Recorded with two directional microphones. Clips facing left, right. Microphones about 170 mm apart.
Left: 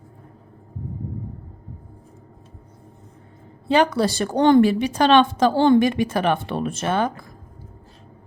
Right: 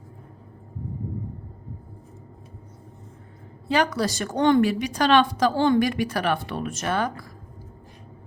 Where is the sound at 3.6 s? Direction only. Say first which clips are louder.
Left 5 dB; 25° left (ahead or behind).